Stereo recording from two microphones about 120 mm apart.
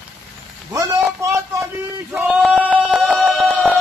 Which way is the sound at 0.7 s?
25° right (ahead or behind).